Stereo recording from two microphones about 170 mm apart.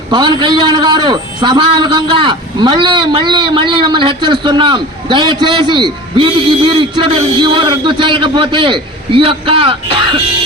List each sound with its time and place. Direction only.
0.1 s a man's voice: 25° right (ahead or behind)